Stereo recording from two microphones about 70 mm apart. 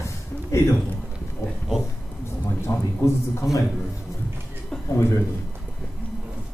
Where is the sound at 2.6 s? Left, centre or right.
Left.